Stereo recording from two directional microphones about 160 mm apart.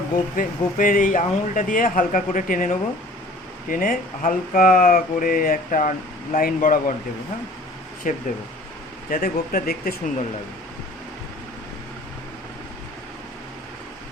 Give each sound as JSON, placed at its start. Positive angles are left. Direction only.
{"t": 0.3, "sound": "speech", "side_deg": 60}
{"t": 8.1, "sound": "speech", "side_deg": 55}